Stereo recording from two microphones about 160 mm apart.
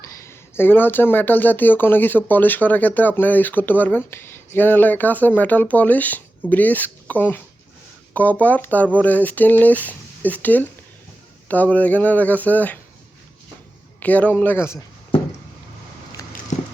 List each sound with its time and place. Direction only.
0.0 s speech: 15° left (ahead or behind)
14.0 s speech: 10° left (ahead or behind)
16.5 s clip-clop: 50° left (ahead or behind)